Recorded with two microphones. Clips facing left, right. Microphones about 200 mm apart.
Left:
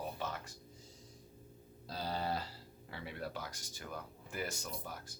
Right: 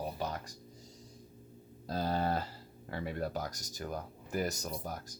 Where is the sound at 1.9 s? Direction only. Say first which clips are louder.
Right 6 dB; 50° right (ahead or behind).